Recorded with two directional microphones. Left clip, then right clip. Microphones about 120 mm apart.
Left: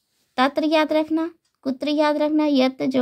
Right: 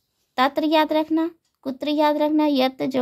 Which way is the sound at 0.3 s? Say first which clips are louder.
Even; 20° left (ahead or behind).